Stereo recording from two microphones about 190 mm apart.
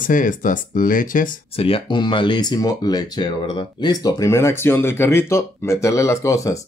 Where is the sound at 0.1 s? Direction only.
45° left (ahead or behind).